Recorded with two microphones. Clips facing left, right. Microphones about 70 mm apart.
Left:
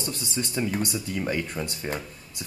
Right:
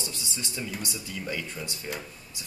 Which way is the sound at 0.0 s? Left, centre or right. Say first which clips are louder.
Left 6 dB; left.